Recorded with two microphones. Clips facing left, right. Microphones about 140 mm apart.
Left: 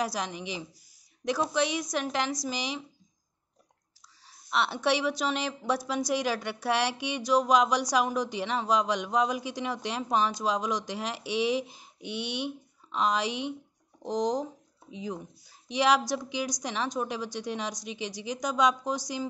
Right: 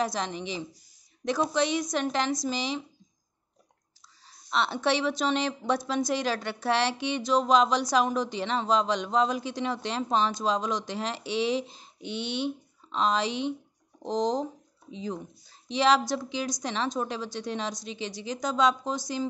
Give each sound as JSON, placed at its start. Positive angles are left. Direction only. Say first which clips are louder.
{"t": 0.0, "sound": "a woman's voice", "louder": "right 2 dB", "side_deg": 10}
{"t": 4.3, "sound": "a woman's voice", "louder": "right 1 dB", "side_deg": 5}